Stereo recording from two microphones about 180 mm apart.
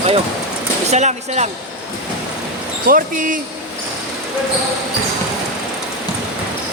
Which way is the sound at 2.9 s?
50° right (ahead or behind).